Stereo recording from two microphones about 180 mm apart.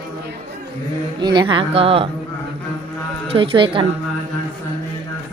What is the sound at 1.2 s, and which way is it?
Speech, 25° right (ahead or behind).